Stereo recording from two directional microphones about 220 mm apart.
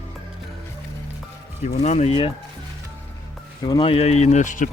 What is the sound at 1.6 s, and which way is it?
Speech, 30° left (ahead or behind).